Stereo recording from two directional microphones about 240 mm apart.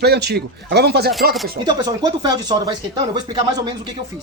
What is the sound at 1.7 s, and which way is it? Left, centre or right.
Speech, centre.